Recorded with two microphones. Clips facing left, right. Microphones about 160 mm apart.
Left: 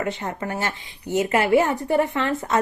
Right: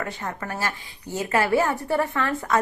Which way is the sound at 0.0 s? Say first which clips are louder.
Left 4 dB; 20° left (ahead or behind).